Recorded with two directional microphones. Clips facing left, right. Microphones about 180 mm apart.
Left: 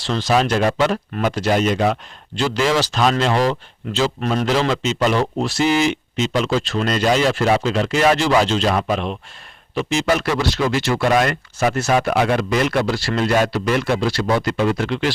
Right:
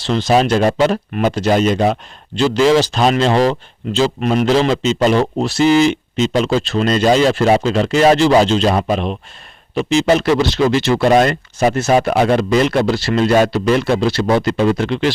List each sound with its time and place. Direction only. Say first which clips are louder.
0.0 s speech: right 4 dB; 25° right (ahead or behind)
11.9 s speech: right 4 dB; 35° right (ahead or behind)